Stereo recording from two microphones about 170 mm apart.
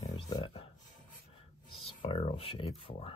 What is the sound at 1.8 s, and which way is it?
Speech, 35° left (ahead or behind).